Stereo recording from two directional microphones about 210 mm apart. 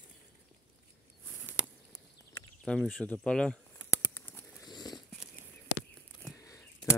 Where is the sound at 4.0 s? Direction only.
10° left (ahead or behind).